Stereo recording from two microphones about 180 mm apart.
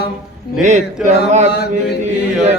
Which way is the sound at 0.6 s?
40° right (ahead or behind).